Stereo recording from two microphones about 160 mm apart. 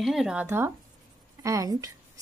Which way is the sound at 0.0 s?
Centre (ahead or behind).